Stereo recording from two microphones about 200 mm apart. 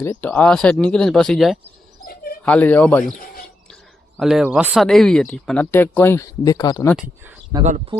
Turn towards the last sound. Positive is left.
turn(degrees=-35)  # may be behind; listen again after turning